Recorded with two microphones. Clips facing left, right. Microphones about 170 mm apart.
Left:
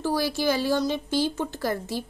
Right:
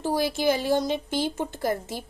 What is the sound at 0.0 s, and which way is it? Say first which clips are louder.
Speech: right 1 dB; 20° right (ahead or behind).